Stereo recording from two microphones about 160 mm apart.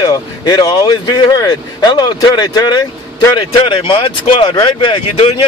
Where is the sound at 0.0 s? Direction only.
25° left (ahead or behind).